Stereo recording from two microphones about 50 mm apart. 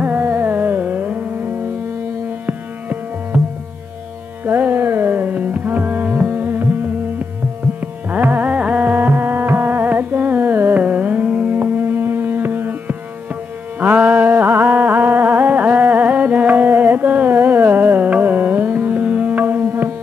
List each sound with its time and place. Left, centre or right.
0.2 s carnatic music: right
4.5 s carnatic music: right
8.1 s music: right
10.8 s carnatic music: right
11.6 s music: right
13.7 s music: right
16.7 s carnatic music: right
19.6 s tabla: right